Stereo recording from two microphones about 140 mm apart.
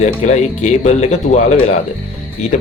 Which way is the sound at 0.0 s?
55° left (ahead or behind).